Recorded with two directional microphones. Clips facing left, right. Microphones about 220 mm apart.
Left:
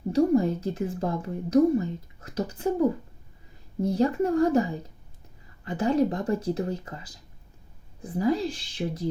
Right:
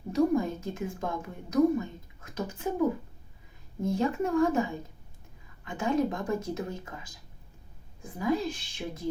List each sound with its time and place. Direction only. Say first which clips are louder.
0.1 s a woman's voice: left 4 dB; 35° left (ahead or behind)
3.8 s a woman's voice: left 4 dB; 35° left (ahead or behind)
8.0 s a woman's voice: left 4 dB; 35° left (ahead or behind)